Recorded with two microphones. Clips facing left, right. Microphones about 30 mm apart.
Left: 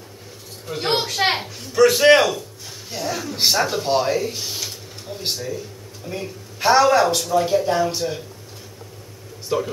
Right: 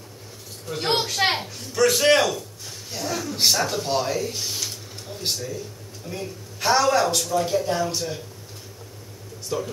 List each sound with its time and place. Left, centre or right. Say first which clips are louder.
0.7 s speech: left 2 dB; centre
9.5 s speech: left 5 dB; left